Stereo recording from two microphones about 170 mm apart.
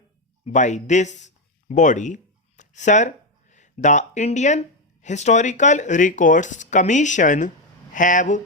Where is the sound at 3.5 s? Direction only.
45° left (ahead or behind).